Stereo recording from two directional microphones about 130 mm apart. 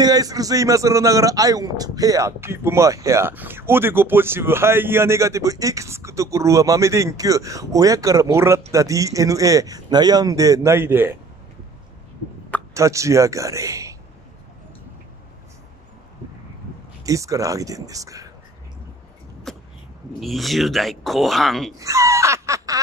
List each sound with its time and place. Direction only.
0.0 s a man's voice: 30° right (ahead or behind)
12.7 s a man's voice: 25° right (ahead or behind)
17.0 s a man's voice: 25° right (ahead or behind)
19.5 s vehicle: 5° left (ahead or behind)
20.2 s speech: centre (ahead or behind)
21.7 s a sound: 25° right (ahead or behind)